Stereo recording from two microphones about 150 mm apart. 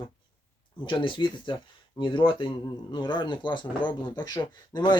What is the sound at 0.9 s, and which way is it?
Speech, 35° left (ahead or behind).